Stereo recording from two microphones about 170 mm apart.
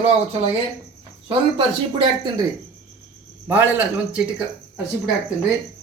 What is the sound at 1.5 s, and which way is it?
Speech, 25° right (ahead or behind).